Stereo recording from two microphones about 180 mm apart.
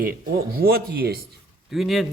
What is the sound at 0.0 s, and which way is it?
Speech, 55° right (ahead or behind).